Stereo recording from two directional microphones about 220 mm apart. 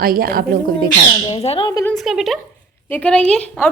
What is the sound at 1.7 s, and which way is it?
Speech, 15° left (ahead or behind).